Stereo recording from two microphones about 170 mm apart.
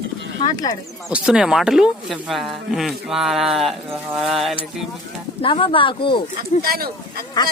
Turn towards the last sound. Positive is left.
turn(degrees=25)  # may be behind; listen again after turning